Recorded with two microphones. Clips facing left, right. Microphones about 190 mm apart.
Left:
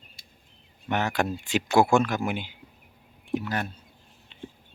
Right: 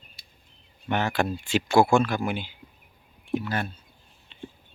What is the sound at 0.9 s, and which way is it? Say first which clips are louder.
Speech: right 1 dB; 15° left (ahead or behind).